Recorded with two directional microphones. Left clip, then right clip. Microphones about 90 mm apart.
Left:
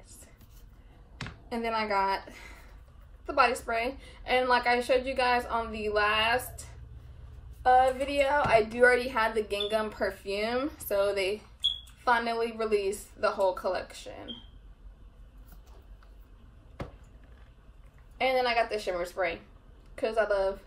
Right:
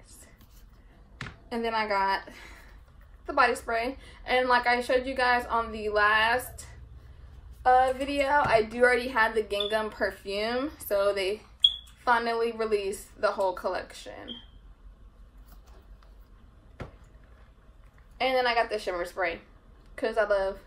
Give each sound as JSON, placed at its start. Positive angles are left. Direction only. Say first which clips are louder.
{"t": 1.5, "sound": "a woman's voice", "louder": "right 1 dB", "side_deg": -10}
{"t": 18.2, "sound": "a woman's voice", "louder": "right 1 dB", "side_deg": 0}